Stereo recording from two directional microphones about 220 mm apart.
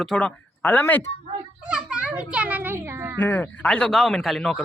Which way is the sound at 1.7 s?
5° right (ahead or behind).